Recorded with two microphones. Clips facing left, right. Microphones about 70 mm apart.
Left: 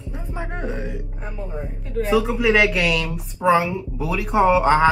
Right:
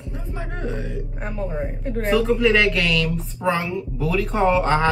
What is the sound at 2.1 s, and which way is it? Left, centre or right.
A woman's voice, centre.